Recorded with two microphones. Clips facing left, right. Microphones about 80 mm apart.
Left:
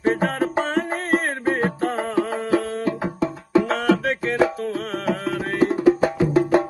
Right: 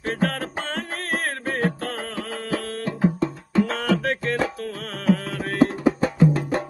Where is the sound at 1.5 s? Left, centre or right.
Left.